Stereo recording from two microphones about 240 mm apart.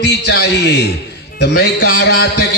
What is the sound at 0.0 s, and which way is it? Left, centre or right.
A man's voice, left.